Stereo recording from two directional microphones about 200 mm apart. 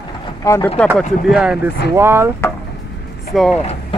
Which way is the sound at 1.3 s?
5° right (ahead or behind).